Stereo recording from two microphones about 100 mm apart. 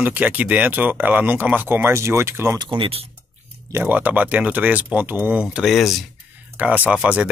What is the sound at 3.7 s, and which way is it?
Speech, 20° right (ahead or behind).